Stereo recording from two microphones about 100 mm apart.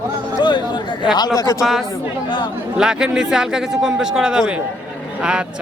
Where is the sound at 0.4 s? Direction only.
50° left (ahead or behind).